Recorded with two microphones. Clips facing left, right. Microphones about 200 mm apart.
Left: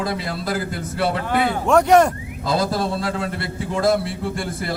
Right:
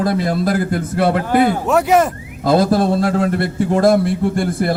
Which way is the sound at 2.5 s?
50° right (ahead or behind).